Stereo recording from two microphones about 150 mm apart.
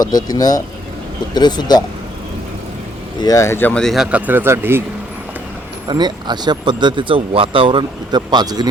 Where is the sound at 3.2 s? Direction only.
20° left (ahead or behind); by 4.8 s 15° right (ahead or behind).